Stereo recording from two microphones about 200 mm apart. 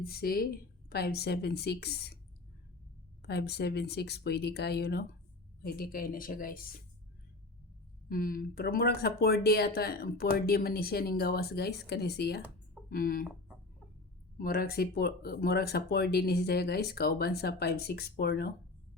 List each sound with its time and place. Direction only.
0.0 s speech: 50° left (ahead or behind)
3.2 s speech: 55° left (ahead or behind)
8.1 s speech: 45° left (ahead or behind)
14.3 s speech: 50° left (ahead or behind)